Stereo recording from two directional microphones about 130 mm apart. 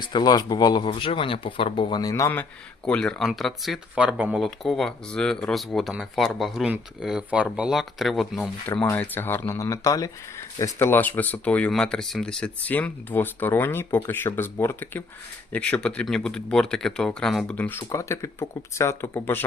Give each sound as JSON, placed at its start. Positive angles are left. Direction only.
{"t": 0.0, "sound": "speech", "side_deg": 35}
{"t": 0.9, "sound": "speech", "side_deg": 40}
{"t": 2.4, "sound": "speech", "side_deg": 5}
{"t": 4.4, "sound": "speech", "side_deg": 0}
{"t": 8.8, "sound": "speech", "side_deg": 15}
{"t": 17.6, "sound": "speech", "side_deg": 15}